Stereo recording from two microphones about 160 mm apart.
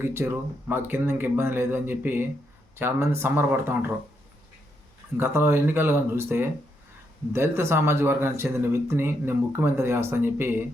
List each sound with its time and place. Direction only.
0.0 s speech: 15° right (ahead or behind)
5.1 s speech: 15° right (ahead or behind)